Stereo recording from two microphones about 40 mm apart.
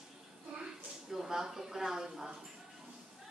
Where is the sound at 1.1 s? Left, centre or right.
Centre.